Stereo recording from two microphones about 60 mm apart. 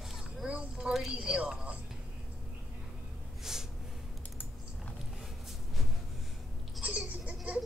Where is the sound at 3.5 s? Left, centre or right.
Centre.